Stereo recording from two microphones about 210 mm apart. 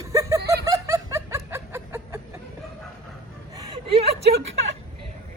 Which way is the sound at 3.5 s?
25° right (ahead or behind).